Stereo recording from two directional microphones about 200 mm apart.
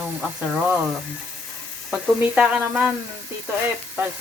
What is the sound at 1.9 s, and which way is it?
Speech, 5° right (ahead or behind).